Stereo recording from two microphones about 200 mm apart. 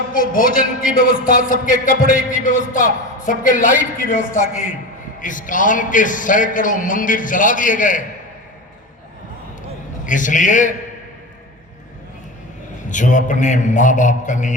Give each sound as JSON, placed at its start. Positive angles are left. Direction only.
{"t": 0.1, "sound": "a man's voice", "side_deg": 45}
{"t": 0.9, "sound": "music", "side_deg": 40}
{"t": 10.1, "sound": "music", "side_deg": 40}
{"t": 12.9, "sound": "music", "side_deg": 40}